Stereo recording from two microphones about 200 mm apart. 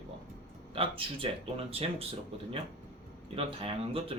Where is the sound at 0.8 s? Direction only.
25° right (ahead or behind).